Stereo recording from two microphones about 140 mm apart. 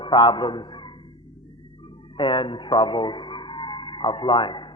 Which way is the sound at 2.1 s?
35° left (ahead or behind).